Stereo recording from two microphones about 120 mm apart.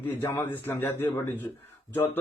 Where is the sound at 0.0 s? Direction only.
20° left (ahead or behind).